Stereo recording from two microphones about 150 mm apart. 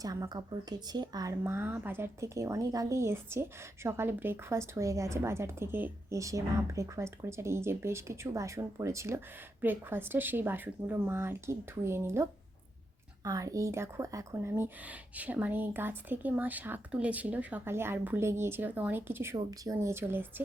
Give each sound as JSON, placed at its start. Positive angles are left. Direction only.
{"t": 0.0, "sound": "a woman's voice", "side_deg": -25}